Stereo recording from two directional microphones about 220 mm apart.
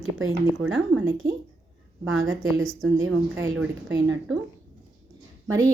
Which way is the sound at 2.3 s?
65° right (ahead or behind).